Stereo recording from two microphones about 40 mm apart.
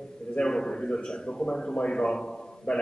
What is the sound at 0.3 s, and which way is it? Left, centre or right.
A man's voice, left.